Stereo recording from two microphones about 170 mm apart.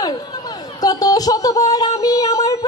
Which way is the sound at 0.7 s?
20° left (ahead or behind).